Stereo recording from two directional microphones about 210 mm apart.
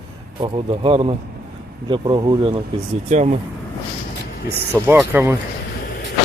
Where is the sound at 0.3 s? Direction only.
25° right (ahead or behind).